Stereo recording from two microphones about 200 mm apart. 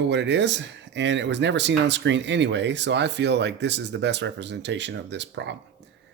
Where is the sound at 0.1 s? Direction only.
60° right (ahead or behind).